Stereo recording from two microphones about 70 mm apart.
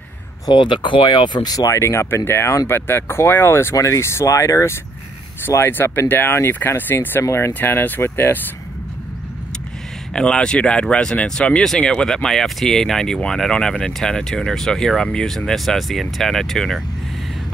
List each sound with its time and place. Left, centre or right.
0.5 s speech: left
1.7 s speech: left
3.7 s speech: left
5.7 s speech: left
7.2 s speech: left
7.5 s speech: left
10.1 s speech: centre